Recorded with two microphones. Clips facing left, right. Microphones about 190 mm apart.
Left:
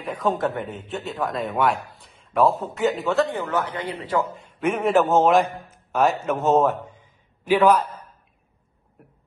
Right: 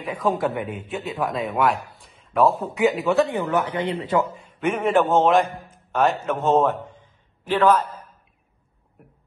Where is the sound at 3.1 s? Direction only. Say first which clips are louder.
Right 2 dB; 15° right (ahead or behind).